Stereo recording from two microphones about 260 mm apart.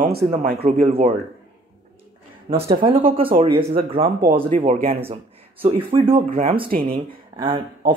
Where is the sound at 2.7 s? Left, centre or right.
Right.